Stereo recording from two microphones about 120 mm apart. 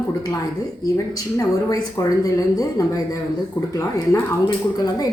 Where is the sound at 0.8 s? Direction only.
30° left (ahead or behind).